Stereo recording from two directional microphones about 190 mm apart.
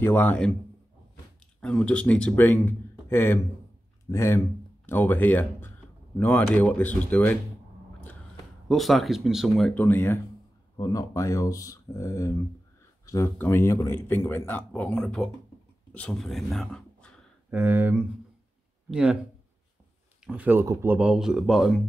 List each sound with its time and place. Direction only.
0.0 s speech: 10° left (ahead or behind)
1.6 s speech: 5° left (ahead or behind)
8.6 s speech: centre (ahead or behind)
15.9 s a sound: 5° left (ahead or behind)
17.6 s speech: 10° right (ahead or behind)
20.2 s speech: 10° right (ahead or behind)